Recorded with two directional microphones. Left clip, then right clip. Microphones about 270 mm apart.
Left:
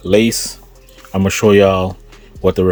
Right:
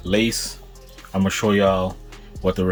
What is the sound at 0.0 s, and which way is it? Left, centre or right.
Speech, left.